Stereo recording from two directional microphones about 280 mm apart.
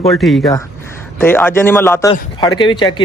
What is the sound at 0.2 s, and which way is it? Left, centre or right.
A man's voice, centre.